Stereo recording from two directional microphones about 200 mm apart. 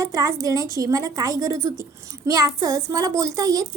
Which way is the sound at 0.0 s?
15° right (ahead or behind).